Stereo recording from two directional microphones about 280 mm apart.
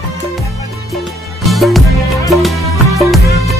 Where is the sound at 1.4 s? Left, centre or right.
Centre.